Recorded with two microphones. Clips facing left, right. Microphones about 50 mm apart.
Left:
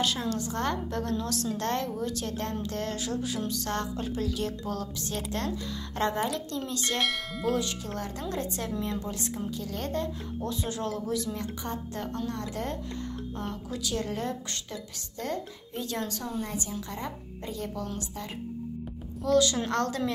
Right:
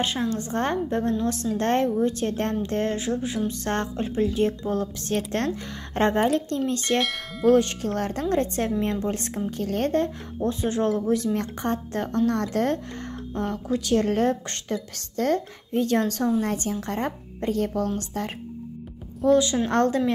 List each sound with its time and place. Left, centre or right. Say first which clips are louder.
0.0 s a woman's voice: right 3 dB; right
5.0 s a woman's voice: right 5 dB; right
7.0 s bell: right 3 dB; centre
7.4 s a woman's voice: right 11 dB; right
10.4 s speech: right 9 dB; right
11.3 s speech: right 8 dB; right
13.3 s a woman's voice: right 8 dB; right
19.2 s a woman's voice: right 5 dB; right